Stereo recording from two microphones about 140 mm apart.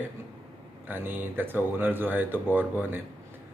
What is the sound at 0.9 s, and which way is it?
Speech, 15° right (ahead or behind).